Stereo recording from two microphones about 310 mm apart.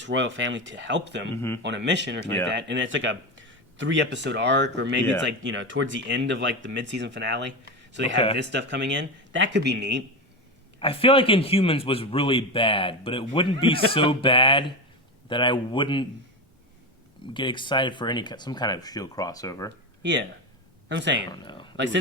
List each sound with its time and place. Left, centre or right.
0.0 s speech: right
1.4 s a man's voice: centre
1.6 s speech: right
10.8 s a man's voice: centre
17.3 s a man's voice: centre
20.0 s speech: right
21.2 s a man's voice: centre